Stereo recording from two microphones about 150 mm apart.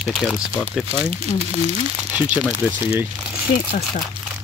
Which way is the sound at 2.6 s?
10° right (ahead or behind).